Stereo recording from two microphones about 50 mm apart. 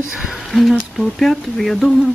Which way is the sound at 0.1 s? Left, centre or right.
Centre.